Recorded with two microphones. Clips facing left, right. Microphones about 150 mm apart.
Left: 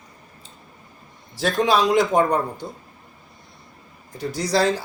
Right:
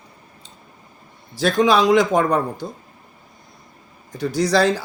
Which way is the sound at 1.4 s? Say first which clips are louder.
Right 3 dB; 90° right.